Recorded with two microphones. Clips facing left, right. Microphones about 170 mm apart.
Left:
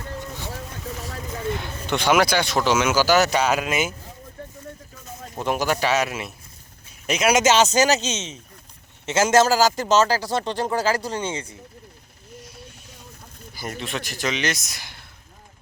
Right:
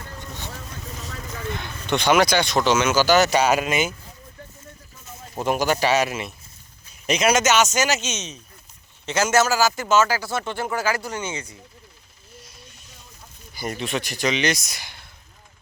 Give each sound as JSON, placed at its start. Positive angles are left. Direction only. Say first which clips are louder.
{"t": 1.2, "sound": "vehicle", "louder": "left 3 dB", "side_deg": 30}
{"t": 1.9, "sound": "speech", "louder": "right 1 dB", "side_deg": 5}
{"t": 5.3, "sound": "speech", "louder": "right 1 dB", "side_deg": 0}
{"t": 7.3, "sound": "speech", "louder": "left 2 dB", "side_deg": 30}
{"t": 12.4, "sound": "a sound", "louder": "left 5 dB", "side_deg": 10}
{"t": 13.5, "sound": "speech", "louder": "right 3 dB", "side_deg": 0}